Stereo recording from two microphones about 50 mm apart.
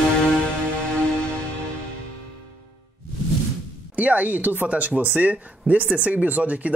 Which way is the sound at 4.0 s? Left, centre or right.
Right.